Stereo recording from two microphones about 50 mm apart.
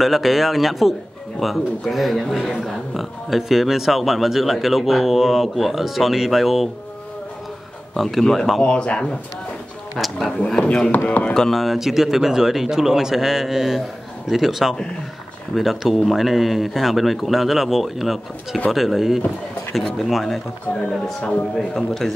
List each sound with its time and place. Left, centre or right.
0.0 s speech: centre
7.9 s speech: centre
8.6 s a man's voice: left
9.9 s speech: centre
10.4 s a man's voice: left
11.3 s a man's voice: centre
11.6 s speech: centre
21.5 s a man's voice: centre